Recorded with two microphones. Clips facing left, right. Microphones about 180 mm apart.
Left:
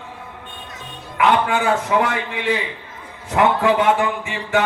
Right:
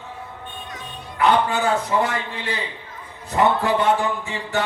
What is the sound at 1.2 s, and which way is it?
A man's voice, 90° left.